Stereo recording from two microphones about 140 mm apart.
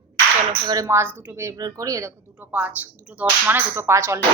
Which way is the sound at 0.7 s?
25° right (ahead or behind).